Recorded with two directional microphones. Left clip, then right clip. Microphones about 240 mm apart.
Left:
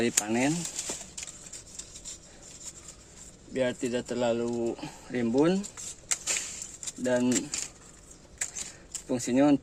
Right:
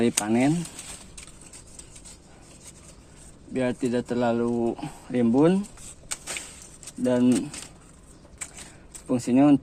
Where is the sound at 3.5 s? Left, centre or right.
Right.